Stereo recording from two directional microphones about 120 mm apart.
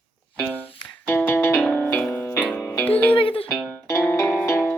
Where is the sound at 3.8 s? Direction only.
25° left (ahead or behind).